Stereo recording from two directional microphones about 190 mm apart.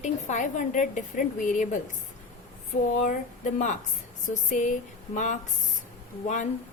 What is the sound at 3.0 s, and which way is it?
A woman's voice, 40° left (ahead or behind).